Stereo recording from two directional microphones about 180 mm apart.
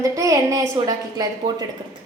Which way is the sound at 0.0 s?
15° right (ahead or behind).